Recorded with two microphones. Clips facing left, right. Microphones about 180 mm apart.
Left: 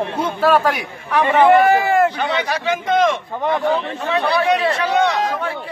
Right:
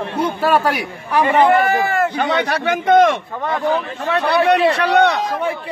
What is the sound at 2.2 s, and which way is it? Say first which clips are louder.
Speech: right 3 dB; 60° right (ahead or behind).